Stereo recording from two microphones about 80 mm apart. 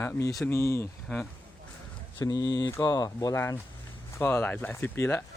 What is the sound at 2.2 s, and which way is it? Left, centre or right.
Speech, left.